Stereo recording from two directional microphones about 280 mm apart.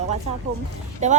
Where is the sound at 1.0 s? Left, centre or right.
Right.